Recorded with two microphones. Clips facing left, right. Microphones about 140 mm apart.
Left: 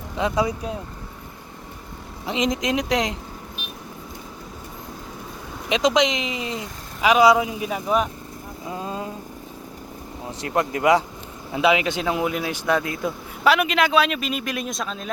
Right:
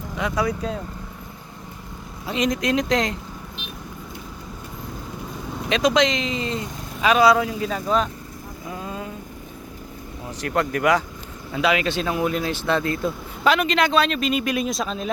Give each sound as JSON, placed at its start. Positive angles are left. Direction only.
{"t": 0.2, "sound": "speech", "side_deg": 20}
{"t": 2.2, "sound": "speech", "side_deg": 20}
{"t": 5.6, "sound": "speech", "side_deg": 15}
{"t": 8.7, "sound": "vehicle", "side_deg": 25}
{"t": 10.2, "sound": "speech", "side_deg": 20}